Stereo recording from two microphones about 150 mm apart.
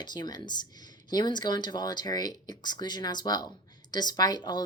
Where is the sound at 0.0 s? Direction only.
30° left (ahead or behind).